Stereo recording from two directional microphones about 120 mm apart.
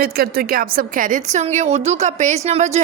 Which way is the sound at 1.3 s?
75° right (ahead or behind).